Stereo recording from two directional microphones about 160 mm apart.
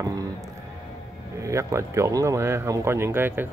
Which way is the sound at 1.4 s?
20° right (ahead or behind).